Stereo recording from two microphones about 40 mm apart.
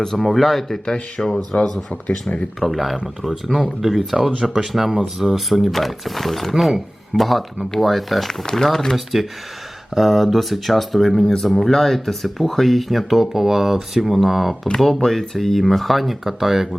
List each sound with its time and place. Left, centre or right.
0.2 s speech: centre
0.9 s speech: left
1.5 s speech: left
2.6 s speech: centre
8.3 s speech: centre
9.9 s speech: centre